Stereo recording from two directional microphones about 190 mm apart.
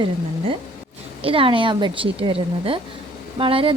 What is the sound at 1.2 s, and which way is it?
Speech, 30° right (ahead or behind).